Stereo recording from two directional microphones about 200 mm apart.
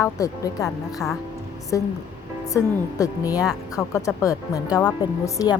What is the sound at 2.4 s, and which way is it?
A woman's voice, 15° left (ahead or behind).